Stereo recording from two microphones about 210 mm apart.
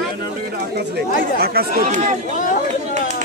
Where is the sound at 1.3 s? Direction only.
45° right (ahead or behind).